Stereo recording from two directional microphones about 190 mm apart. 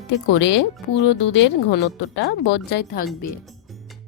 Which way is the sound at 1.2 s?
70° left (ahead or behind).